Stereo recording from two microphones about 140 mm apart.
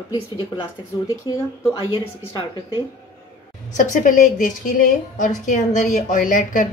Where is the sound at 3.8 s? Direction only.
65° left (ahead or behind).